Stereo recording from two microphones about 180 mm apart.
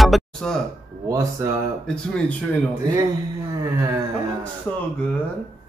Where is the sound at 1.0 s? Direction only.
15° right (ahead or behind).